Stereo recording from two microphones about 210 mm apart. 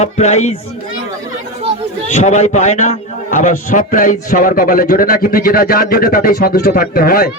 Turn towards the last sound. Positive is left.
turn(degrees=45)  # may be behind; listen again after turning